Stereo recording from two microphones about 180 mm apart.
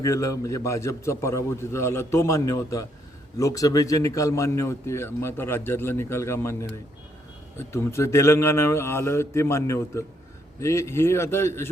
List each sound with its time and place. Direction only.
0.0 s a man's voice: 15° left (ahead or behind)